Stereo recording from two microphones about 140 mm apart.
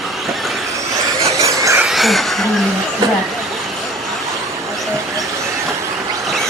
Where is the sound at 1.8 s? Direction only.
Centre (ahead or behind).